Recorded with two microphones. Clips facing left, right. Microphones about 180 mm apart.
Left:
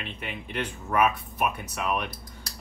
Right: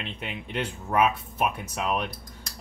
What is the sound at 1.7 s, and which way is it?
Speech, 30° right (ahead or behind).